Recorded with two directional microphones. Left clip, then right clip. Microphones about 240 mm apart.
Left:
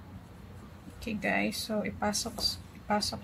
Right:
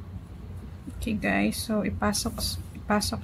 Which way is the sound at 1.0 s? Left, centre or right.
Centre.